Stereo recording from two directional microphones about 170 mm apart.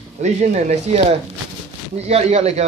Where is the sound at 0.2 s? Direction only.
45° right (ahead or behind).